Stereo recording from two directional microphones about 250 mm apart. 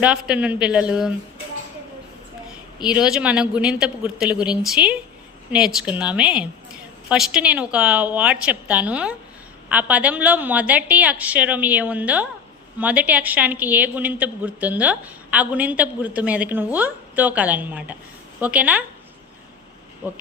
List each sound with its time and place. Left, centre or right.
0.0 s a man's voice: centre
2.8 s a man's voice: centre
20.0 s a woman's voice: centre